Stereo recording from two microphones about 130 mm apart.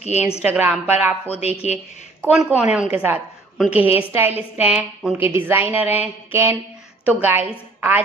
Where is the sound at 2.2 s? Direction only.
10° right (ahead or behind).